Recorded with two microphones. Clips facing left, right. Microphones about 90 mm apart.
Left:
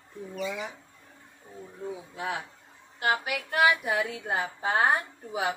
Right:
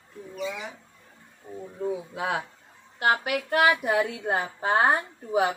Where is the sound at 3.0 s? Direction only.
50° right (ahead or behind).